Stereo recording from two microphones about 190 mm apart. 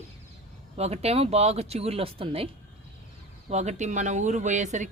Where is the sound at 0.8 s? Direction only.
35° right (ahead or behind).